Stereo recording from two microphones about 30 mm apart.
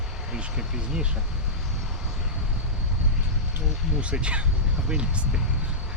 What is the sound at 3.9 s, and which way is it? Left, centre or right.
Speech, right.